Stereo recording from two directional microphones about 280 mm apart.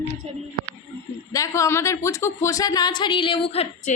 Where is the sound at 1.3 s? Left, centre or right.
Centre.